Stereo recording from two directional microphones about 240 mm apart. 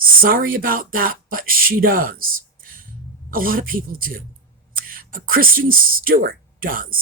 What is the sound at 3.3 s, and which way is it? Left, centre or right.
Speech, right.